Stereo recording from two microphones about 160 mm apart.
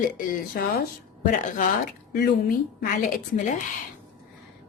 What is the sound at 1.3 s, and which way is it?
Speech, 55° left (ahead or behind).